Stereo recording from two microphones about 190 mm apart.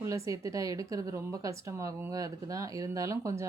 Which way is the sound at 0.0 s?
15° right (ahead or behind).